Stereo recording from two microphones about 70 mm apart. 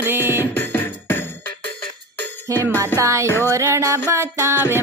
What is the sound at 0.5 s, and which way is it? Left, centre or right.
Music, left.